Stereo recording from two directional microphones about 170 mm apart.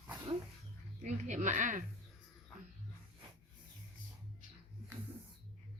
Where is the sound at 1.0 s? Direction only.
45° right (ahead or behind).